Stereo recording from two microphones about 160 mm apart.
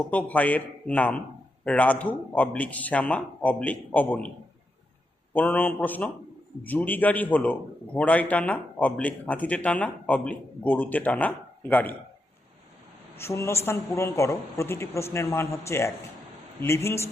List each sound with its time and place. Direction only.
0.1 s speech: 10° left (ahead or behind)
5.3 s speech: 10° left (ahead or behind)
13.1 s speech: 15° left (ahead or behind)